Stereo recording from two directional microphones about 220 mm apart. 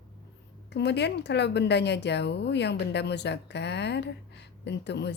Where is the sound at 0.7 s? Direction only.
50° left (ahead or behind).